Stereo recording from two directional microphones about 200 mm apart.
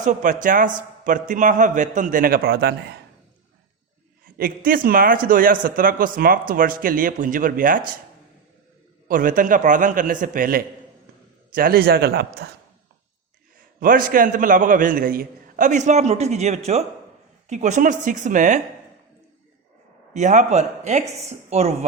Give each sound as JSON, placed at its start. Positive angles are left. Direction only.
{"t": 0.0, "sound": "a man's voice", "side_deg": -40}
{"t": 4.4, "sound": "speech", "side_deg": -45}
{"t": 9.0, "sound": "a man's voice", "side_deg": -40}
{"t": 13.7, "sound": "a man's voice", "side_deg": -45}
{"t": 20.1, "sound": "a man's voice", "side_deg": -35}